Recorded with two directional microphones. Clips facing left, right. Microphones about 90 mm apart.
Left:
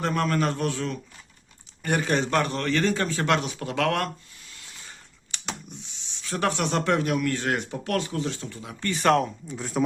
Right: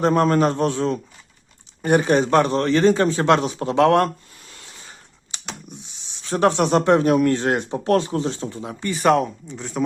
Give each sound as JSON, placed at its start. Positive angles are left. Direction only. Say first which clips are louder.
{"t": 0.0, "sound": "a man's voice", "louder": "right 8 dB", "side_deg": -30}
{"t": 6.2, "sound": "a man's voice", "louder": "right 8 dB", "side_deg": -30}
{"t": 8.8, "sound": "speech", "louder": "right 4 dB", "side_deg": -5}